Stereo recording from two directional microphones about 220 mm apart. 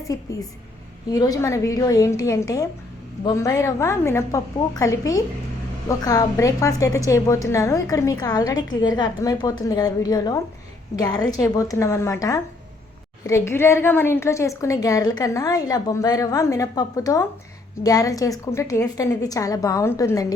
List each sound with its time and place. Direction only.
0.1 s a woman's voice: 15° left (ahead or behind)